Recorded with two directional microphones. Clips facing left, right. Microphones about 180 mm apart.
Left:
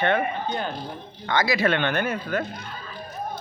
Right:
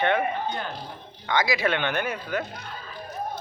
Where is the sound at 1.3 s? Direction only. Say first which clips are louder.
Left 2 dB; 15° right (ahead or behind).